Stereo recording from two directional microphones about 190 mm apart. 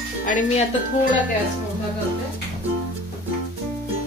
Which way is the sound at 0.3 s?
40° left (ahead or behind).